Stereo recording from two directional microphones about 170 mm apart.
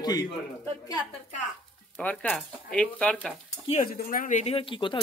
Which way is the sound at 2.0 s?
10° left (ahead or behind).